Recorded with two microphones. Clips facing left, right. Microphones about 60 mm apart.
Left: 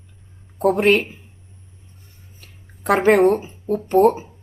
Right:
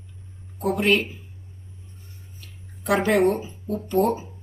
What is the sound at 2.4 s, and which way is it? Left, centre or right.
Speech, left.